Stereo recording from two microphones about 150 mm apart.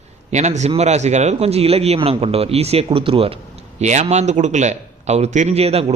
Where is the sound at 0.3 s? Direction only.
50° right (ahead or behind).